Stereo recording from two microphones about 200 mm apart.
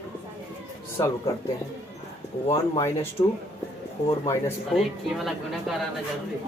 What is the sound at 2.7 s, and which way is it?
Speech, 15° left (ahead or behind).